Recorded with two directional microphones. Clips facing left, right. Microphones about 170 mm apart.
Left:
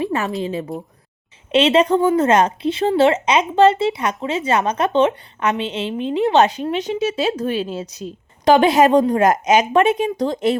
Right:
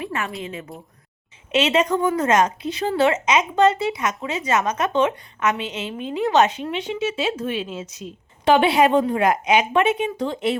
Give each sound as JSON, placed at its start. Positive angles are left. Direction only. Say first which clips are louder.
{"t": 0.0, "sound": "a sound", "louder": "left 7 dB", "side_deg": 30}
{"t": 0.7, "sound": "speech", "louder": "left 10 dB", "side_deg": 0}
{"t": 1.5, "sound": "speech", "louder": "left 5 dB", "side_deg": 30}